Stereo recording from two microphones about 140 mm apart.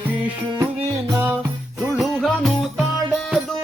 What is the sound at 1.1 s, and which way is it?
Music, 15° right (ahead or behind).